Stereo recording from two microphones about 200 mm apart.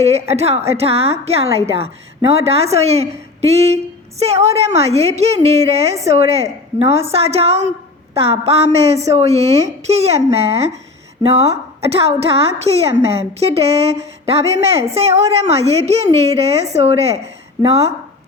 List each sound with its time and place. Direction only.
0.0 s a woman's voice: 30° right (ahead or behind)